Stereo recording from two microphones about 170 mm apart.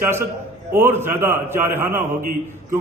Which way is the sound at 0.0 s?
15° right (ahead or behind).